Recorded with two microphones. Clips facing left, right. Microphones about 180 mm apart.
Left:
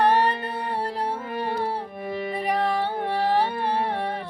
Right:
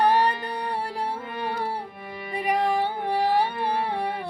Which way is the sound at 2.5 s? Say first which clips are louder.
Right 2 dB; 10° right (ahead or behind).